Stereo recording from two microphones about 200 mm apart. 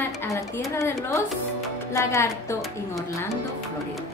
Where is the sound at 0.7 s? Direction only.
15° left (ahead or behind).